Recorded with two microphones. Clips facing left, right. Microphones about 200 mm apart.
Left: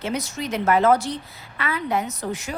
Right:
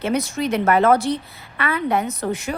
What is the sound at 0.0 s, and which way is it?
A woman's voice, 60° right (ahead or behind).